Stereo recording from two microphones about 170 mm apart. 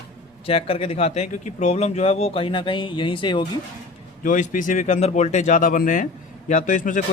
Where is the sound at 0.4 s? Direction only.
35° left (ahead or behind).